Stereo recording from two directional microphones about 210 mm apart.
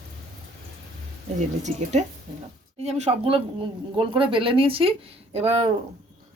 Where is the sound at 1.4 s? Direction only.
35° right (ahead or behind).